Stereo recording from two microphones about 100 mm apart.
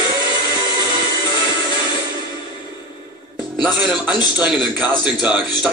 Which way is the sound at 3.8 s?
10° right (ahead or behind).